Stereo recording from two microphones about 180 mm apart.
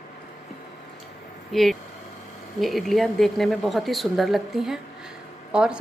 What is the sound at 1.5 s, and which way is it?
A woman's voice, centre (ahead or behind).